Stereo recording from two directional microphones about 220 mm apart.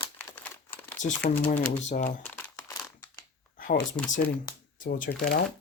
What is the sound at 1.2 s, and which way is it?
Speech, 40° left (ahead or behind).